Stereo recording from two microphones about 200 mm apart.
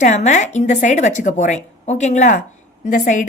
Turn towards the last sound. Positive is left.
turn(degrees=40)  # may be behind; listen again after turning